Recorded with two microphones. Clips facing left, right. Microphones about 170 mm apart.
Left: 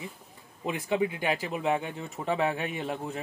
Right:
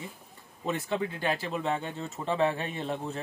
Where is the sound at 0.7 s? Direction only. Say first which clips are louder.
Left 2 dB; 15° left (ahead or behind).